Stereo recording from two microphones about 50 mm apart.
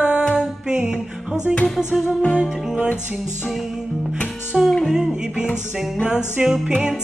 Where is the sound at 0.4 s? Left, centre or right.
Centre.